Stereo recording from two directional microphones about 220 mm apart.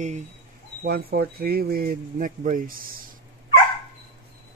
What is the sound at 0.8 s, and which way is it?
Speech, 45° right (ahead or behind).